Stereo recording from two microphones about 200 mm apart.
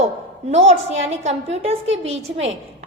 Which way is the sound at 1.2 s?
35° right (ahead or behind).